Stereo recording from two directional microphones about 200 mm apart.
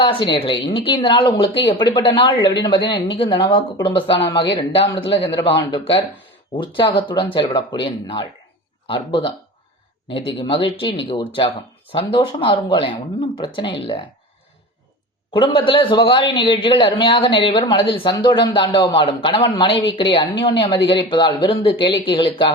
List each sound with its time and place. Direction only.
0.0 s speech: 25° left (ahead or behind)
15.3 s speech: 25° left (ahead or behind)